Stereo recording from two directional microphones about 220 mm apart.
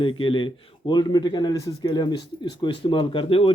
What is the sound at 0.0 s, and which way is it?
Speech, 25° left (ahead or behind).